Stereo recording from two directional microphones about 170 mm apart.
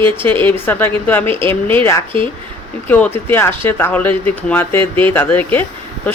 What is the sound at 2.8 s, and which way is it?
Speech, 10° left (ahead or behind).